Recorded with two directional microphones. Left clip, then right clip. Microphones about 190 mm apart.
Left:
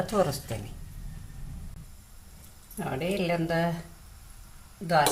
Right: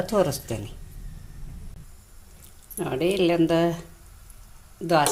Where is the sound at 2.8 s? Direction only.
40° right (ahead or behind).